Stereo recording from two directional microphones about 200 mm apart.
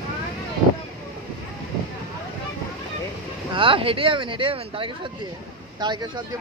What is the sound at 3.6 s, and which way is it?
Speech, 25° right (ahead or behind).